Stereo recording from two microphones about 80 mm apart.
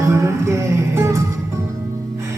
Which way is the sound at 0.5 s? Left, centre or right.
Right.